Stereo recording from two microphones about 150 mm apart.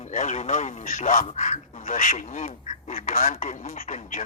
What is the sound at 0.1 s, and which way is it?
A man's voice, 55° left (ahead or behind).